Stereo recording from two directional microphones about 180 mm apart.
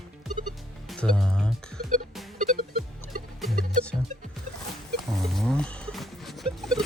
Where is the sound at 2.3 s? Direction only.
45° right (ahead or behind).